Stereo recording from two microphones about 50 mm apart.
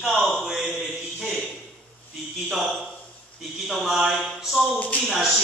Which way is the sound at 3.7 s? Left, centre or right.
Centre.